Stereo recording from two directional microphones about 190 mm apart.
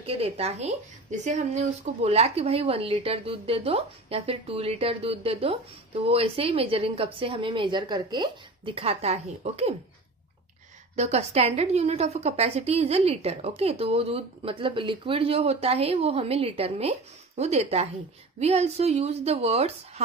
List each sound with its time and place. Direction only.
0.0 s a woman's voice: 30° right (ahead or behind)
11.0 s a woman's voice: 35° right (ahead or behind)